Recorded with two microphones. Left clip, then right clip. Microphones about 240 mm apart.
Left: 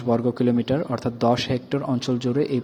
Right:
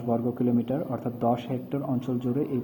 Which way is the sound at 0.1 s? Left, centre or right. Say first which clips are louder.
Left 5 dB; left.